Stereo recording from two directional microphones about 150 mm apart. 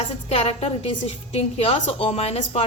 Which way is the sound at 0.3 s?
40° left (ahead or behind).